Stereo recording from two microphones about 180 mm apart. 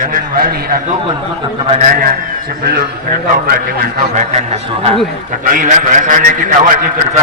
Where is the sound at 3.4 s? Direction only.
55° right (ahead or behind).